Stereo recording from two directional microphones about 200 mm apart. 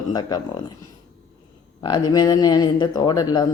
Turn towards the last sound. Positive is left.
turn(degrees=20)  # may be behind; listen again after turning